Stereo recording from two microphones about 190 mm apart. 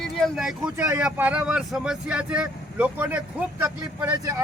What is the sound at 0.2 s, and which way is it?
Speech, centre (ahead or behind).